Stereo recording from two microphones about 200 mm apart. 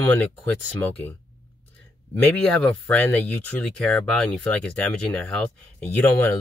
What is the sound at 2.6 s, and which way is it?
Speech, 5° left (ahead or behind).